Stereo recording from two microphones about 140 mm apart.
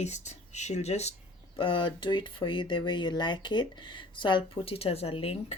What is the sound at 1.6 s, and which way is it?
Speech, 40° left (ahead or behind).